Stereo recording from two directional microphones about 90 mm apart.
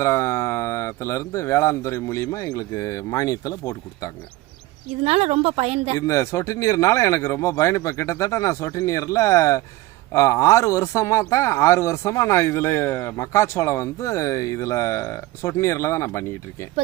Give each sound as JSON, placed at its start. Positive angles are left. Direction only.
{"t": 0.0, "sound": "a man's voice", "side_deg": 30}
{"t": 6.0, "sound": "a man's voice", "side_deg": 35}